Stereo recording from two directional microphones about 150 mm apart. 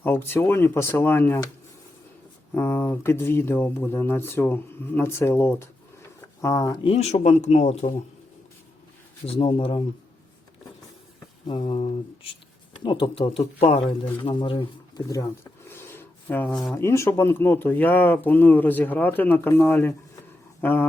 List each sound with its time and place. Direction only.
0.0 s speech: 15° left (ahead or behind)
2.6 s speech: 15° left (ahead or behind)
6.8 s speech: 45° left (ahead or behind)
9.2 s speech: 40° left (ahead or behind)
11.4 s speech: 35° left (ahead or behind)
15.7 s a sound: 15° left (ahead or behind)
16.7 s speech: 20° left (ahead or behind)